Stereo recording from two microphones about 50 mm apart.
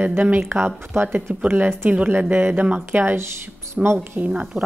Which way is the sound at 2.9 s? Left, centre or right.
Right.